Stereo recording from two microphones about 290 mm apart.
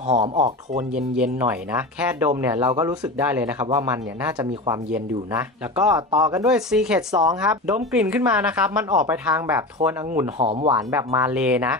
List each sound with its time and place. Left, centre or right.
0.1 s speech: right
0.9 s speech: centre
10.7 s speech: centre